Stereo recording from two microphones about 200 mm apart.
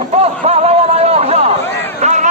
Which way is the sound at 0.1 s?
30° right (ahead or behind).